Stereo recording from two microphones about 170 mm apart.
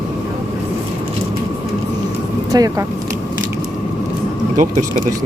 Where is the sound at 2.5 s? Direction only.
20° right (ahead or behind).